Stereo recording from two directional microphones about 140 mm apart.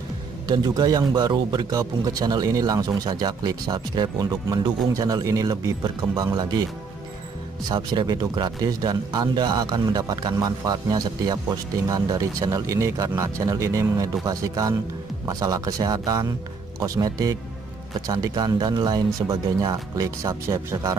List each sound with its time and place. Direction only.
0.5 s speech: 30° right (ahead or behind)
7.6 s speech: 30° right (ahead or behind)